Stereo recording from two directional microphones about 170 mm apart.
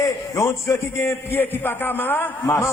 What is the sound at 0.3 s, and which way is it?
A man's voice, 15° left (ahead or behind).